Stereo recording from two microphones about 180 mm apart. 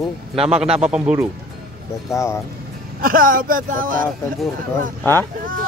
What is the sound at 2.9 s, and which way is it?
Speech, 50° right (ahead or behind).